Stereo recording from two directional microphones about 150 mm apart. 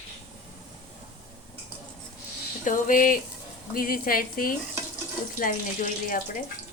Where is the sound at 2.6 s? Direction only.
60° left (ahead or behind).